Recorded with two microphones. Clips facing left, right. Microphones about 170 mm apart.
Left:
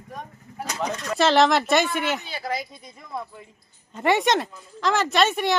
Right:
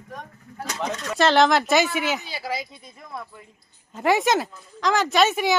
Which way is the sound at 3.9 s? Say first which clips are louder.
Even; centre (ahead or behind).